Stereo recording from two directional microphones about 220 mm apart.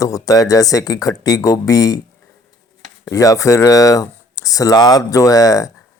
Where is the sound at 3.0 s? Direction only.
15° left (ahead or behind).